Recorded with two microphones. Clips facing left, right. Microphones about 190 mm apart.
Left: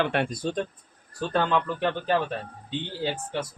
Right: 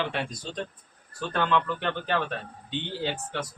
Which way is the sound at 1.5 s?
15° left (ahead or behind).